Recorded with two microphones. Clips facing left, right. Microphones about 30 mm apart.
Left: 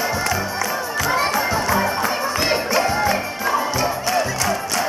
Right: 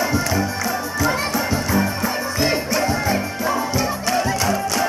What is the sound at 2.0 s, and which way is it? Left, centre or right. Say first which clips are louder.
Music: left 1 dB; left.